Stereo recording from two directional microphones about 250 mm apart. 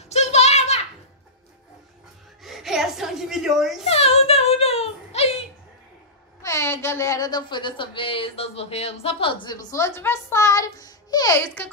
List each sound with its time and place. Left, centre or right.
0.1 s a sound: left
2.4 s gasp: centre
3.8 s whimper: left
6.4 s a woman's voice: centre